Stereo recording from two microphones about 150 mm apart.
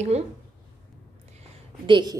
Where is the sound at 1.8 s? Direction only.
35° right (ahead or behind).